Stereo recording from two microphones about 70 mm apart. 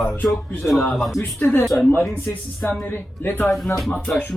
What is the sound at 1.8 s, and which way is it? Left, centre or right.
A man's voice, left.